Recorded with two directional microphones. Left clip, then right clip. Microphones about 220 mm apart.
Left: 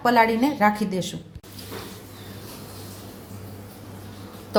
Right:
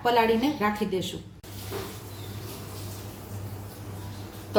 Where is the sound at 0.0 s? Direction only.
30° left (ahead or behind).